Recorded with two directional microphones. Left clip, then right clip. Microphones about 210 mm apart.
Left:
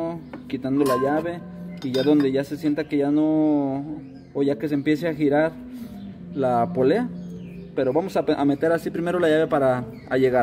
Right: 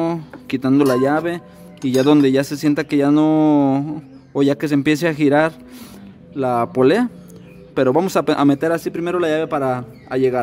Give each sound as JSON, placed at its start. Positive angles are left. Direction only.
{"t": 0.0, "sound": "a man's voice", "side_deg": -50}
{"t": 6.3, "sound": "a man's voice", "side_deg": -30}